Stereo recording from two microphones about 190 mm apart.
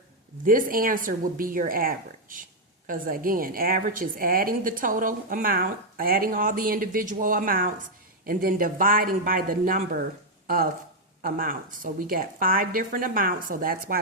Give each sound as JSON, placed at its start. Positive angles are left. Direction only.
{"t": 0.4, "sound": "speech", "side_deg": -45}